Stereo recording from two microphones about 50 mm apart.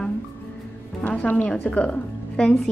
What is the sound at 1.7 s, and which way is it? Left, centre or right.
Speech, left.